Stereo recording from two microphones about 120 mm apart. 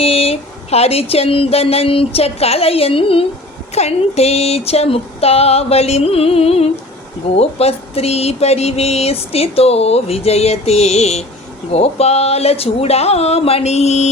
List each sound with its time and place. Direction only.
0.0 s speech: 55° left (ahead or behind)